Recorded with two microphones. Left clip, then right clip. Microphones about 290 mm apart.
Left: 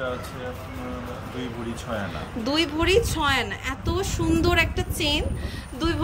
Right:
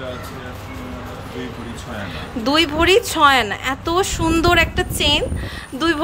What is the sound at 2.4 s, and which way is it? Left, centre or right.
A woman's voice, centre.